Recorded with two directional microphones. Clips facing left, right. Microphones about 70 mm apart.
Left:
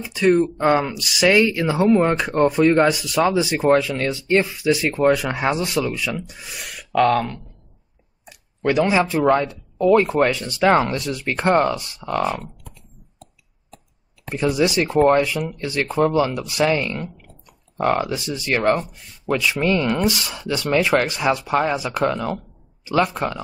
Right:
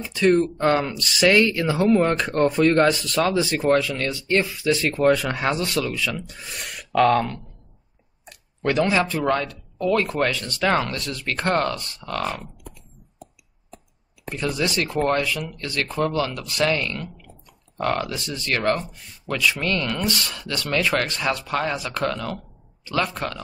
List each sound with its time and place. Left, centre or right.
0.0 s speech: centre
8.3 s clicking: centre
8.8 s speech: centre
14.3 s speech: centre